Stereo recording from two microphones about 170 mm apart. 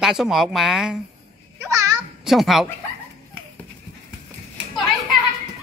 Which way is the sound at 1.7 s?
20° right (ahead or behind).